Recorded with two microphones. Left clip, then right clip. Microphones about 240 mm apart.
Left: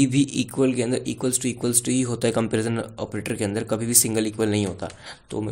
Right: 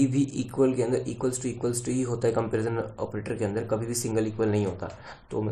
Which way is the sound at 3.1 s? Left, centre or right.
Left.